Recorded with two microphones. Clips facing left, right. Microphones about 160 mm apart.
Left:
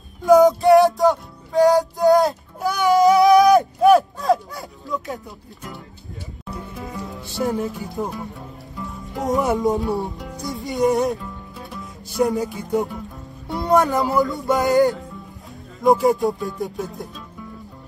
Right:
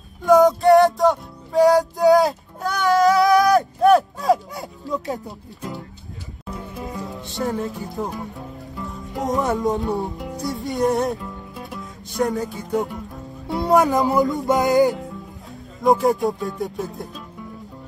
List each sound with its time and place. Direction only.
0.2 s music: centre (ahead or behind)
2.8 s a sound: 20° left (ahead or behind)
3.8 s a sound: centre (ahead or behind)
4.6 s a sound: 20° right (ahead or behind)
6.8 s music: 20° right (ahead or behind)
7.6 s music: centre (ahead or behind)
12.4 s music: 20° left (ahead or behind)
13.5 s music: centre (ahead or behind)
13.8 s music: 20° right (ahead or behind)
15.8 s music: centre (ahead or behind)